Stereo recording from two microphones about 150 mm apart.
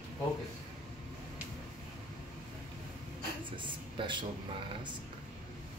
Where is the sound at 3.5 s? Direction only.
35° right (ahead or behind).